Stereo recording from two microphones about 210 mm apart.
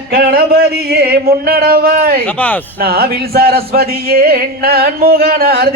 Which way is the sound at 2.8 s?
45° right (ahead or behind).